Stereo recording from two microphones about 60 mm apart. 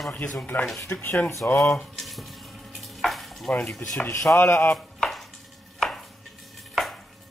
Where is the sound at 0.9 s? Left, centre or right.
Left.